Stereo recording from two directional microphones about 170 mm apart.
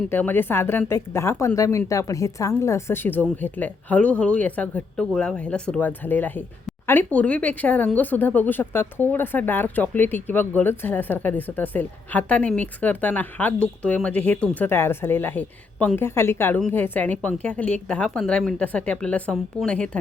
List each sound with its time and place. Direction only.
0.1 s speech: 10° left (ahead or behind)